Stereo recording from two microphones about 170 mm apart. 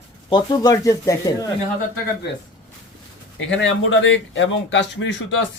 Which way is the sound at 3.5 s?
90° left.